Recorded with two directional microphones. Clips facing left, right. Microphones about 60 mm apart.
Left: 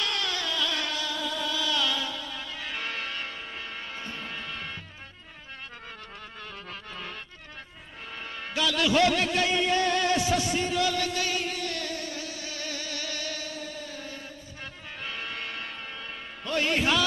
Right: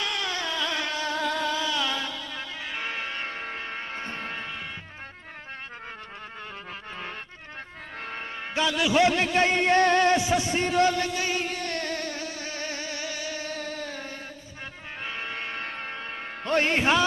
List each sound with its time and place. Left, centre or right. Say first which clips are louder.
0.0 s a sound: right 1 dB; right
1.1 s music: right 5 dB; right
1.6 s music: right 1 dB; right
3.3 s music: right 4 dB; right
8.4 s a man's voice: right 1 dB; right
10.1 s a man's voice: right 2 dB; right
10.5 s music: right 4 dB; right
11.6 s music: right 3 dB; right; by 13.4 s centre
13.5 s a sound: right 4 dB; right
15.0 s music: right 2 dB; right